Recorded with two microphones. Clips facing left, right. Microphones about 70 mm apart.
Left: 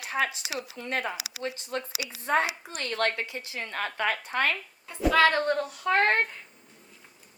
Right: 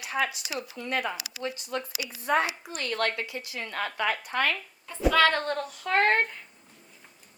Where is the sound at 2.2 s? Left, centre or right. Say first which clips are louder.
Even; left.